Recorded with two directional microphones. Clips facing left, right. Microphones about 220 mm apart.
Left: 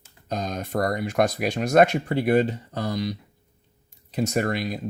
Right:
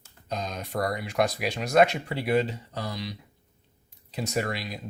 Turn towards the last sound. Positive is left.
turn(degrees=50)  # may be behind; listen again after turning